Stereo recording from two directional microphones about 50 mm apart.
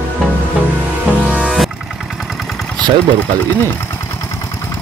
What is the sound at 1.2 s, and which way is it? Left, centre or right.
Music, right.